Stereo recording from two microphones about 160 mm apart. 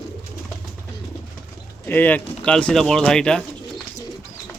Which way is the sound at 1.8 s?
10° left (ahead or behind).